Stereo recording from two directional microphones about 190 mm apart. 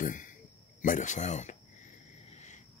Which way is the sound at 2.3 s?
35° left (ahead or behind).